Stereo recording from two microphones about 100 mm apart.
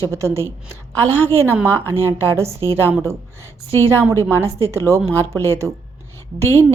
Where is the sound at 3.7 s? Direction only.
25° left (ahead or behind).